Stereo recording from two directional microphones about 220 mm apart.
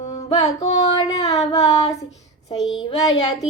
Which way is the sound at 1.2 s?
15° left (ahead or behind).